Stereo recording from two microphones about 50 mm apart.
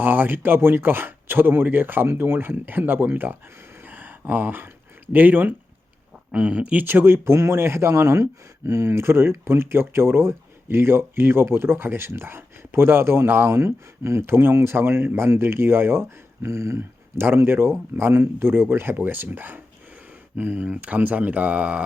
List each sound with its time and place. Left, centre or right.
0.0 s speech: right
3.8 s a sound: right
5.1 s speech: right
6.3 s speech: right
6.8 s speech: right
7.3 s speech: right
13.6 s speech: right
17.2 s speech: right